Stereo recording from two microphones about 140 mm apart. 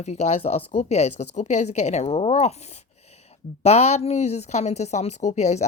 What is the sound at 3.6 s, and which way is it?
Speech, 50° left (ahead or behind).